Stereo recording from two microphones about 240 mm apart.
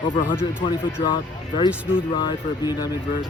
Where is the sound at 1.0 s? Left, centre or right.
Centre.